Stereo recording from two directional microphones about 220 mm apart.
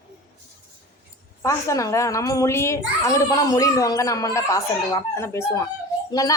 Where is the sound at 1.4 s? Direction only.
15° left (ahead or behind).